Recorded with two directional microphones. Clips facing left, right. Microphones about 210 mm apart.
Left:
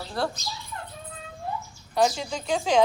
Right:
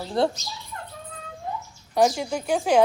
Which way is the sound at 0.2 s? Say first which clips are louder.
Right 6 dB; 20° right (ahead or behind).